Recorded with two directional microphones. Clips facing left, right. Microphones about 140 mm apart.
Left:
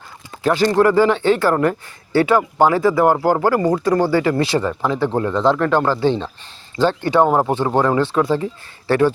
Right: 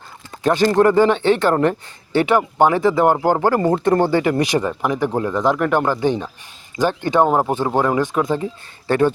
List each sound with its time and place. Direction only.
0.4 s speech: 20° right (ahead or behind)